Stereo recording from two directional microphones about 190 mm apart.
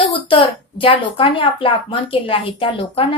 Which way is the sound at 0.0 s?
25° left (ahead or behind).